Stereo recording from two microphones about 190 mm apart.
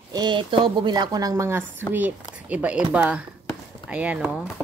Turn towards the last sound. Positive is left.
turn(degrees=-5)  # may be behind; listen again after turning